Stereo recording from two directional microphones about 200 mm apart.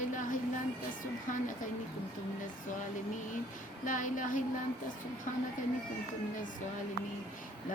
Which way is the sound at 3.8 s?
40° left (ahead or behind).